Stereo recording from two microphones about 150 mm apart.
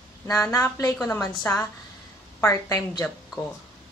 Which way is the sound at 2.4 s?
20° left (ahead or behind).